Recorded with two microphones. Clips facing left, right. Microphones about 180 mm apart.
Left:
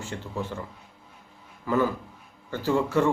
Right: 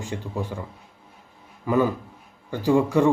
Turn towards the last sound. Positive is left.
turn(degrees=-15)  # may be behind; listen again after turning